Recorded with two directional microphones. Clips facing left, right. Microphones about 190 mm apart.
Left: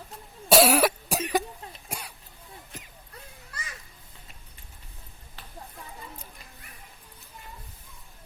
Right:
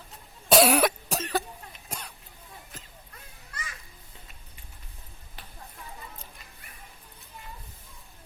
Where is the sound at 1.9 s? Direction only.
10° left (ahead or behind).